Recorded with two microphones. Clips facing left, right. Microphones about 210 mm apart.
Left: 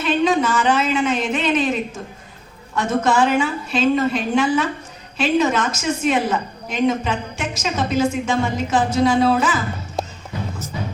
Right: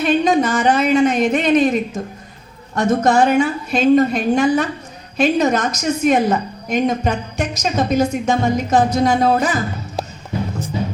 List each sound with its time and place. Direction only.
0.0 s a woman's voice: 40° right (ahead or behind)